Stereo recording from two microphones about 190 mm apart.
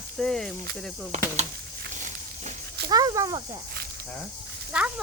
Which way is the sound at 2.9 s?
20° right (ahead or behind).